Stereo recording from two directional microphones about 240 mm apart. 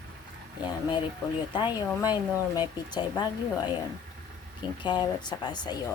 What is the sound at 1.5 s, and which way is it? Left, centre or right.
Speech, centre.